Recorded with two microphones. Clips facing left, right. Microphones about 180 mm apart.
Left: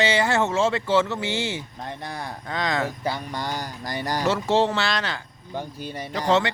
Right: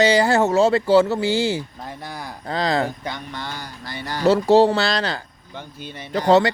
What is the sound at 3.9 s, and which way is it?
Speech, 40° left (ahead or behind).